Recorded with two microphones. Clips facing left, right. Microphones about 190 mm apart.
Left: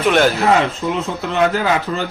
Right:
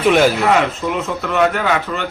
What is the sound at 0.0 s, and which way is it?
Speech, centre (ahead or behind).